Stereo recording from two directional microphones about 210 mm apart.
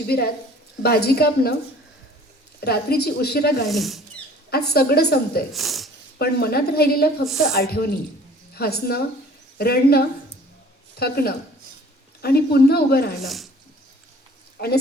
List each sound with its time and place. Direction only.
0.1 s speech: 50° left (ahead or behind)
2.6 s speech: 50° left (ahead or behind)
3.7 s speech: centre (ahead or behind)
4.5 s speech: 50° left (ahead or behind)
5.5 s speech: centre (ahead or behind)
6.1 s speech: 50° left (ahead or behind)
13.2 s speech: centre (ahead or behind)
14.6 s a woman's voice: 45° left (ahead or behind)